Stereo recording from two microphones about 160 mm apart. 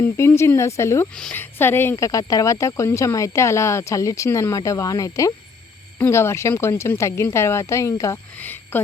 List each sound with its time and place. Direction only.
0.0 s speech: 15° left (ahead or behind)